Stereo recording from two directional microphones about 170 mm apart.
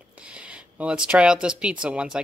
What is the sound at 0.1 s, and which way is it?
Speech, 5° right (ahead or behind).